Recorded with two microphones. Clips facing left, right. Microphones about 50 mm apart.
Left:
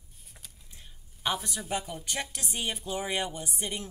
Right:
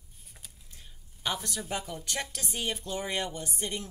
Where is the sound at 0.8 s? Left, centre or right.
Centre.